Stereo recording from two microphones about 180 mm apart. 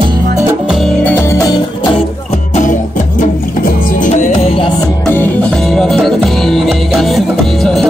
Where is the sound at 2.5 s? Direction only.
45° left (ahead or behind).